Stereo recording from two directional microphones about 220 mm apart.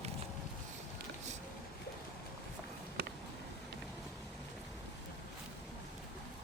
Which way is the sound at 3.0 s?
50° right (ahead or behind).